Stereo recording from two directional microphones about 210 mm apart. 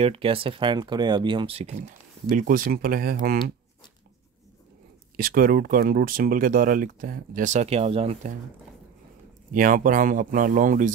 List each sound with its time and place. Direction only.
0.0 s speech: 25° right (ahead or behind); by 3.5 s 45° right (ahead or behind)
5.1 s speech: 45° right (ahead or behind)
9.5 s speech: 40° right (ahead or behind)